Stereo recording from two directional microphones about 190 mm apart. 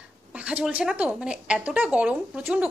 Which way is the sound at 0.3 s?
5° right (ahead or behind).